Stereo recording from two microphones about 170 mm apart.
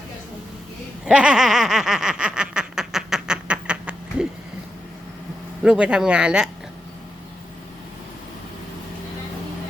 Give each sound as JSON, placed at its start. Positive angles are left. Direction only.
{"t": 1.0, "sound": "snicker", "side_deg": -5}
{"t": 5.6, "sound": "speech", "side_deg": -5}